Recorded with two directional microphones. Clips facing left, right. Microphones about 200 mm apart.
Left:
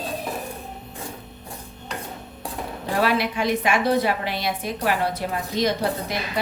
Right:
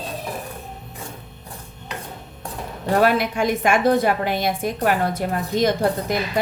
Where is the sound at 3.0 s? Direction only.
45° right (ahead or behind).